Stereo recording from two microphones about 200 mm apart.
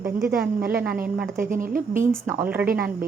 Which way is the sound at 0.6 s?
50° right (ahead or behind).